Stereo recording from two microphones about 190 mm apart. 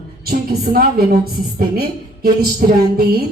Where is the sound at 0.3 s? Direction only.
50° right (ahead or behind).